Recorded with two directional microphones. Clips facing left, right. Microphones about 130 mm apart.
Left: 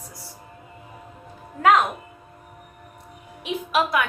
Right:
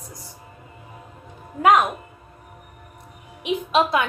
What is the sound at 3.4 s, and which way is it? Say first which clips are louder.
Speech: right 3 dB; 25° right (ahead or behind).